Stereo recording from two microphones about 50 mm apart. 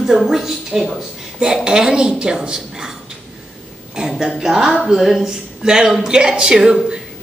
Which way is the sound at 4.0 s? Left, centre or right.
Centre.